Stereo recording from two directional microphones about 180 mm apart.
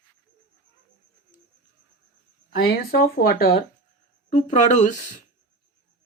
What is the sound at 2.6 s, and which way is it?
Speech, 60° left (ahead or behind).